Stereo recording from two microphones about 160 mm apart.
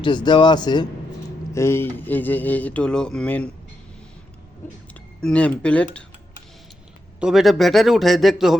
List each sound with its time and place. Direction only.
0.0 s speech: 30° left (ahead or behind)
1.5 s speech: 15° left (ahead or behind)
5.2 s speech: 5° left (ahead or behind)
7.2 s a man's voice: 5° right (ahead or behind)